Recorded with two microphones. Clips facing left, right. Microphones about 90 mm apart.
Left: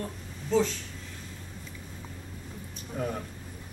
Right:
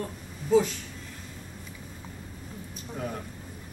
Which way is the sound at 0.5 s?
10° right (ahead or behind).